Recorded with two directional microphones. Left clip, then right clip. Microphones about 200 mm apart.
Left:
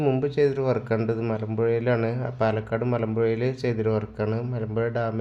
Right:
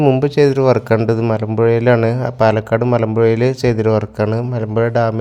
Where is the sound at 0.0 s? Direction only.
40° right (ahead or behind).